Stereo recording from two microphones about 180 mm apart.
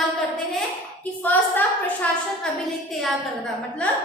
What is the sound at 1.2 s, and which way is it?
A woman's voice, 10° left (ahead or behind).